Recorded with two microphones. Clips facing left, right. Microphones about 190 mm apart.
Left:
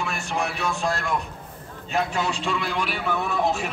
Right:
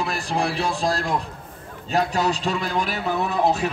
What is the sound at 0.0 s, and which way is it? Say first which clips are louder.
A man's voice: right 3 dB; 35° right (ahead or behind).